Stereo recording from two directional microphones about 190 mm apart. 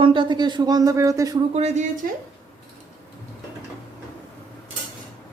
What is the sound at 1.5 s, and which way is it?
Speech, 35° right (ahead or behind).